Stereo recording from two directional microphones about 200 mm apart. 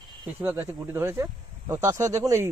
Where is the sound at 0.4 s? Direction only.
10° right (ahead or behind).